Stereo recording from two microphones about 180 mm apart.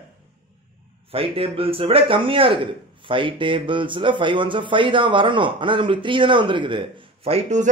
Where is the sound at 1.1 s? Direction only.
30° right (ahead or behind).